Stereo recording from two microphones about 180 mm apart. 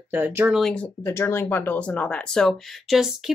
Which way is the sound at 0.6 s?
5° left (ahead or behind).